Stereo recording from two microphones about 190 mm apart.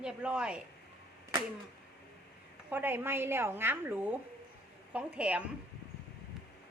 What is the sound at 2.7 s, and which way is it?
A woman's voice, 10° right (ahead or behind).